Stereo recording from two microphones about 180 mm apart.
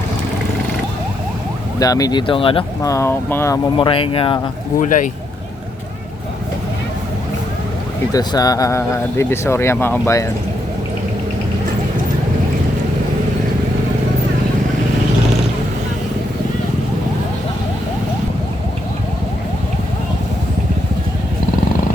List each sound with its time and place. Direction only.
1.8 s speech: 20° left (ahead or behind)
2.8 s speech: 15° left (ahead or behind)
3.8 s speech: 30° left (ahead or behind)
4.8 s speech: 45° left (ahead or behind)
8.1 s speech: 20° left (ahead or behind)